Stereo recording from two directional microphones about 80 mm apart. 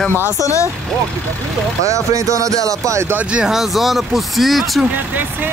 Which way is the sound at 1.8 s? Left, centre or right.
Right.